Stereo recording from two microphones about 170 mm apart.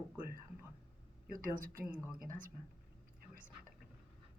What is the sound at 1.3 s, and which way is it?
A woman's voice, 55° right (ahead or behind).